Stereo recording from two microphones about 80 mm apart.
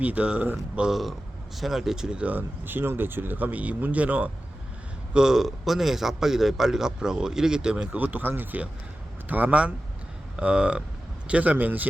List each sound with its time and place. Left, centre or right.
0.0 s a man's voice: centre
0.5 s speech: centre
5.1 s a man's voice: centre
7.9 s a man's voice: right